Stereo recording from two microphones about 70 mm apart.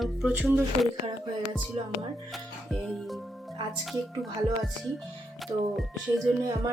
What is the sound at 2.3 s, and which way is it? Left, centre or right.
Music, centre.